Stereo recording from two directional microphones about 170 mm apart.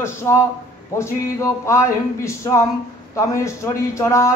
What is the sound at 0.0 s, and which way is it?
Speech, 15° left (ahead or behind).